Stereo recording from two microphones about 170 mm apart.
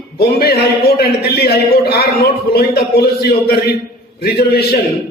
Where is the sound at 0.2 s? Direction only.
65° left (ahead or behind).